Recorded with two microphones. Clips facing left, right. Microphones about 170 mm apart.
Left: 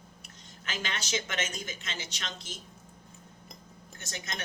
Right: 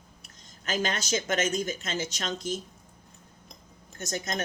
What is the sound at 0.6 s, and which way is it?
Speech, 40° right (ahead or behind).